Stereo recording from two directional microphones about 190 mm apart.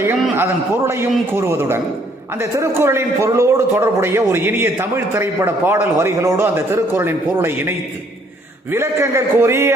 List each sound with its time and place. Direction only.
0.0 s a man's voice: 15° right (ahead or behind)
8.7 s a man's voice: 15° right (ahead or behind)